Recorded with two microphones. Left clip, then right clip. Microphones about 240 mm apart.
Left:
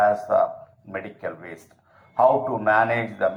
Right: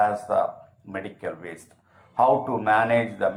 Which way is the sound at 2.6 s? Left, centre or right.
Left.